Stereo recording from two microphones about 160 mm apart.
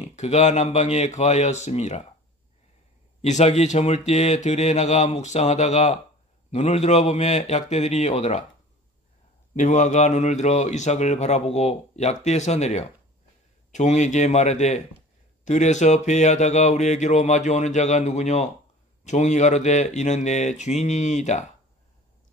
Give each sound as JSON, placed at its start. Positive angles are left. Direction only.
{"t": 0.0, "sound": "speech", "side_deg": 45}
{"t": 3.2, "sound": "speech", "side_deg": 45}
{"t": 9.6, "sound": "speech", "side_deg": 50}